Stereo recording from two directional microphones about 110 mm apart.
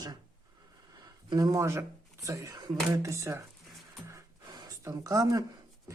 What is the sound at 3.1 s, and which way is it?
Speech, 25° right (ahead or behind).